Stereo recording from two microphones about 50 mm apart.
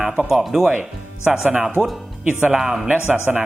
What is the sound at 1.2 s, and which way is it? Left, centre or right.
A man's voice, centre.